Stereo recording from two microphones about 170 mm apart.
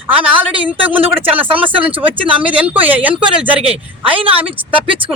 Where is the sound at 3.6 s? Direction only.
35° right (ahead or behind).